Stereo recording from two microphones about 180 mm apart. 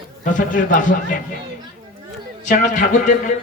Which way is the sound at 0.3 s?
45° left (ahead or behind).